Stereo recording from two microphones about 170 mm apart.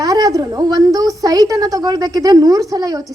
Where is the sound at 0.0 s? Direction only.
20° right (ahead or behind).